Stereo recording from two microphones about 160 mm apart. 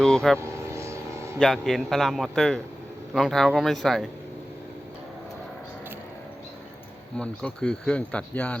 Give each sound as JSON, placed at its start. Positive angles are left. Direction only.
{"t": 0.0, "sound": "speech", "side_deg": 5}
{"t": 0.3, "sound": "vehicle", "side_deg": -20}
{"t": 1.4, "sound": "speech", "side_deg": 0}
{"t": 7.2, "sound": "speech", "side_deg": 5}